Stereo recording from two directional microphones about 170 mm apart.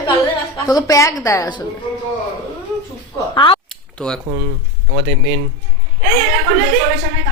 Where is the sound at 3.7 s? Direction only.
5° left (ahead or behind).